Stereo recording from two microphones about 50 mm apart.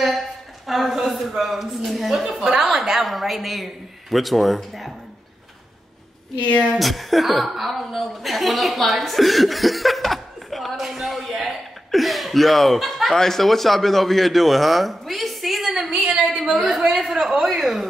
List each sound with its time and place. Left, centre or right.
0.7 s a woman's voice: centre
6.8 s a woman's voice: centre
15.9 s a woman's voice: centre
16.3 s a woman's voice: centre